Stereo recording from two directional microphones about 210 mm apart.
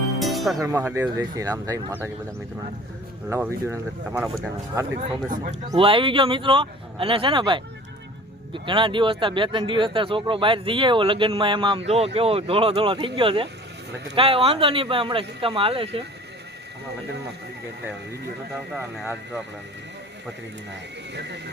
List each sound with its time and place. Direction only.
0.2 s music: centre (ahead or behind)
0.6 s speech: 10° right (ahead or behind)
3.2 s speech: 10° right (ahead or behind)
4.9 s a man's voice: 40° right (ahead or behind)
5.7 s speech: 25° right (ahead or behind)
18.7 s speech: 5° right (ahead or behind)
21.1 s speech: 55° right (ahead or behind)